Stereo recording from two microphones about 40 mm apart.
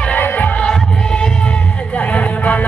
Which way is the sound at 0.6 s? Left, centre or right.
Left.